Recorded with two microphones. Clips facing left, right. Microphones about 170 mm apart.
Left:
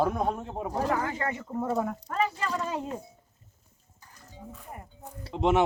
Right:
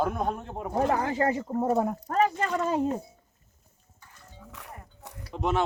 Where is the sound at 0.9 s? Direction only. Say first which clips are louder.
Right 4 dB; 35° right (ahead or behind).